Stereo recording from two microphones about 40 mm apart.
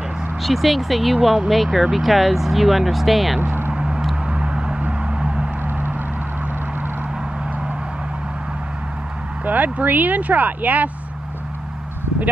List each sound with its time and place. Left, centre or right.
0.4 s speech: centre
3.3 s speech: right
3.7 s a sound: centre
5.7 s music: right
9.4 s speech: right